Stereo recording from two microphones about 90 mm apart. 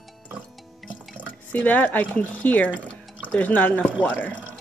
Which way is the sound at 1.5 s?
15° left (ahead or behind).